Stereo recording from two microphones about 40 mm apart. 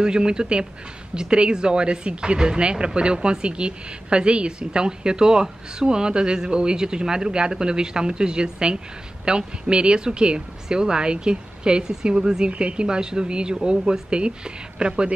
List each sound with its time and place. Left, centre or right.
0.0 s speech: centre
12.4 s speech: right